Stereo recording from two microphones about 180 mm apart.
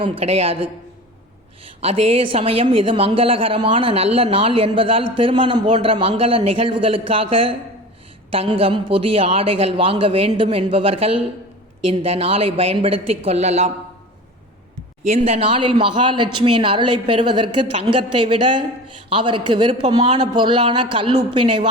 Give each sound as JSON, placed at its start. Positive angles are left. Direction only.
{"t": 0.0, "sound": "a woman's voice", "side_deg": -35}
{"t": 15.0, "sound": "speech", "side_deg": -35}